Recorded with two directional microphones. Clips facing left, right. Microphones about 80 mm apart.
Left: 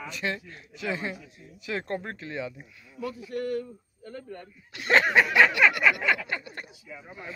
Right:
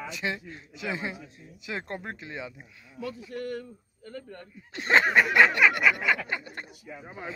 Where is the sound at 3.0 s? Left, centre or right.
Centre.